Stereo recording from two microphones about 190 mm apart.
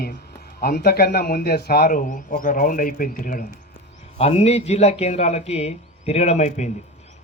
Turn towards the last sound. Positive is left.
turn(degrees=35)  # may be behind; listen again after turning